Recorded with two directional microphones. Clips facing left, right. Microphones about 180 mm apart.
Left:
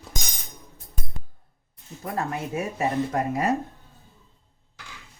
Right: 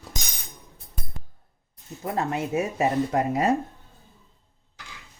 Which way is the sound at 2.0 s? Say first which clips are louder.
Right 2 dB; 25° right (ahead or behind).